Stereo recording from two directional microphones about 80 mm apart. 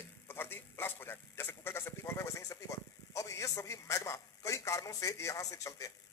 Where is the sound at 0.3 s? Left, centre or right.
Left.